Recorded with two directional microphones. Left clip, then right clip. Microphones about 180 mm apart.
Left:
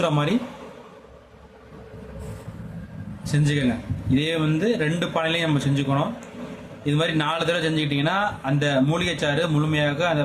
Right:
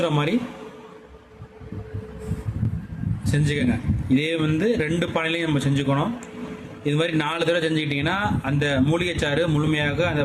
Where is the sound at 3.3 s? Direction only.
15° right (ahead or behind).